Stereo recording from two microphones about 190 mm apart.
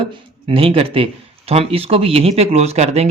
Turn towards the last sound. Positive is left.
turn(degrees=-35)  # may be behind; listen again after turning